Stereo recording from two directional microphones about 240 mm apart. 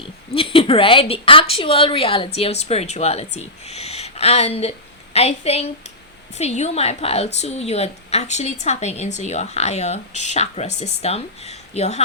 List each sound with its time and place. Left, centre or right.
0.0 s a woman's voice: left